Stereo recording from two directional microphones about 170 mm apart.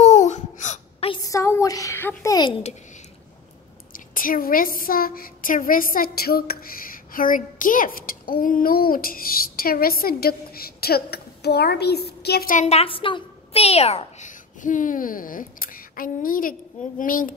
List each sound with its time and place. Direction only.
0.0 s a sound: 40° left (ahead or behind)
1.2 s a woman's voice: 20° left (ahead or behind)
3.9 s a woman's voice: 55° left (ahead or behind)
12.6 s a child's voice: 35° left (ahead or behind); by 17.3 s 55° left (ahead or behind)